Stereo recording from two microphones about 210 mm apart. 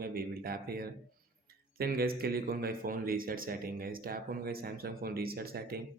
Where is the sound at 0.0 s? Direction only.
45° right (ahead or behind).